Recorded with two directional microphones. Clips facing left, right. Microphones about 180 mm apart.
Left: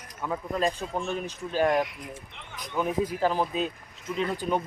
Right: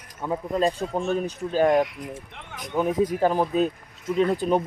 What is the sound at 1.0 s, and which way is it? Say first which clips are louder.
Speech: right 6 dB; 40° right (ahead or behind).